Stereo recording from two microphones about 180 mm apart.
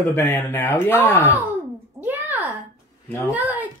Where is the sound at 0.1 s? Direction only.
15° left (ahead or behind).